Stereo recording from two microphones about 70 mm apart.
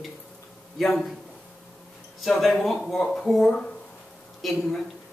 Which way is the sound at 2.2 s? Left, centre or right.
Centre.